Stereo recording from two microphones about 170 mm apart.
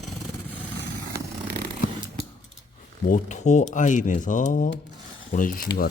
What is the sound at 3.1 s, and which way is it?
Speech, 45° left (ahead or behind).